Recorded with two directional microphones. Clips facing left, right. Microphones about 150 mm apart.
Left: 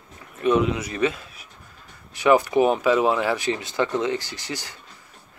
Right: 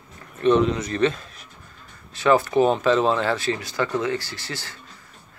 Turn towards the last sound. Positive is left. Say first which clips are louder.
# left 1 dB
turn(degrees=15)  # may be behind; listen again after turning